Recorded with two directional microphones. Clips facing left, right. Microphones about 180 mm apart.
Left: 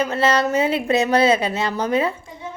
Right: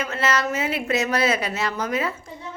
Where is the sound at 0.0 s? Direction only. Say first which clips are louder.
Left 5 dB; 30° left (ahead or behind).